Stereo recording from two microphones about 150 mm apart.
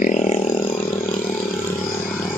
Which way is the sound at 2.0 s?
5° left (ahead or behind).